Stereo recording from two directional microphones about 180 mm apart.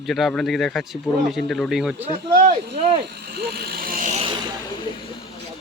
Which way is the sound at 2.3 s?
50° right (ahead or behind).